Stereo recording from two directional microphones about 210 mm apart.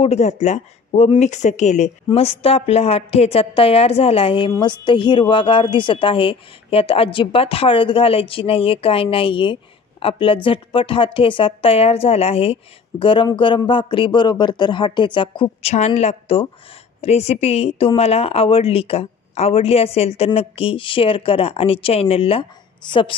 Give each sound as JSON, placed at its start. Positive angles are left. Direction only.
{"t": 0.0, "sound": "speech", "side_deg": 30}